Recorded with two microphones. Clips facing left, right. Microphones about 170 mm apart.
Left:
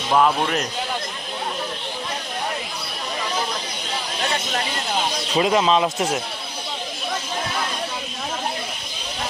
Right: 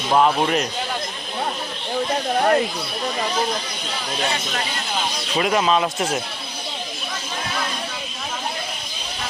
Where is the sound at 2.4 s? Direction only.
65° right (ahead or behind).